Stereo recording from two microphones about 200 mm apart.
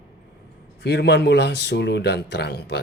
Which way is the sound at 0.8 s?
55° left (ahead or behind).